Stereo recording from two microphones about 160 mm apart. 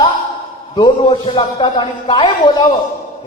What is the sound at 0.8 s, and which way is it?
A man's voice, 30° left (ahead or behind).